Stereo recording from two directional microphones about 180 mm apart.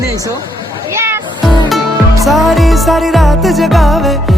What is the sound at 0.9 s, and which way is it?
Music, 15° right (ahead or behind).